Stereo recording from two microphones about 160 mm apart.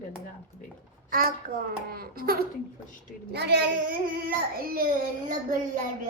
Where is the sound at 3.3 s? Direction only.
90° right.